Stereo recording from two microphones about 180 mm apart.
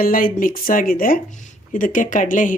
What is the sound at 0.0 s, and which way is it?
Speech, 50° left (ahead or behind).